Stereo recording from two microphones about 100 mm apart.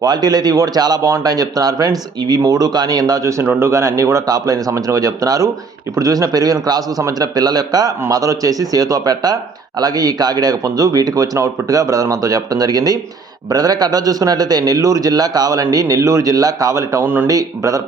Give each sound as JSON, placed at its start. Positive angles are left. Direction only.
{"t": 0.0, "sound": "a man's voice", "side_deg": -40}
{"t": 17.2, "sound": "a man's voice", "side_deg": -35}